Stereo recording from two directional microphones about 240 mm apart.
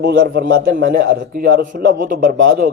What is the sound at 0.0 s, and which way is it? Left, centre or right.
A man's voice, right.